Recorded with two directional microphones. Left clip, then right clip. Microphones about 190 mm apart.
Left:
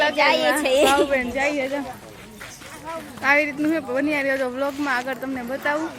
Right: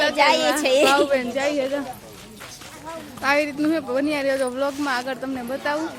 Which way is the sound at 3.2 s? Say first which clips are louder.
Left 1 dB; 15° right (ahead or behind).